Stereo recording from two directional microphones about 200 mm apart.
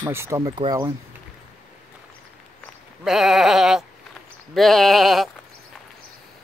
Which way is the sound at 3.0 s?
Centre (ahead or behind).